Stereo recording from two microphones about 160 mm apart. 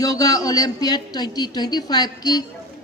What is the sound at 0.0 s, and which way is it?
A woman's voice, 20° left (ahead or behind).